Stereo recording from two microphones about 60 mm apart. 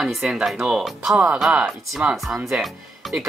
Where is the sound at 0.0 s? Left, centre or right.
Centre.